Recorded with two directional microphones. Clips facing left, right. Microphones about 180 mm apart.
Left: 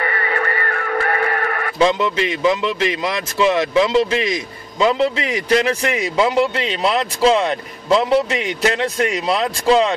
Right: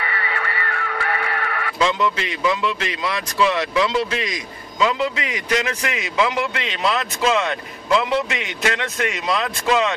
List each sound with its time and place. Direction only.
0.0 s radio: 45° left (ahead or behind)
1.8 s a man's voice: 35° left (ahead or behind)